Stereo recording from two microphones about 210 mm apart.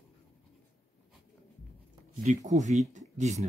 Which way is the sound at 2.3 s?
35° right (ahead or behind).